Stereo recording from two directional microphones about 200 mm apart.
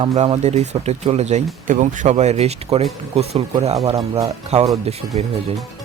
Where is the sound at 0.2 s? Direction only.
35° right (ahead or behind).